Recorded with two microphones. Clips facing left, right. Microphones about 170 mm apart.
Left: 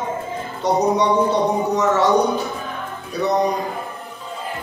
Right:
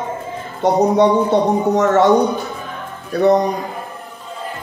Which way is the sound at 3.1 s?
55° right (ahead or behind).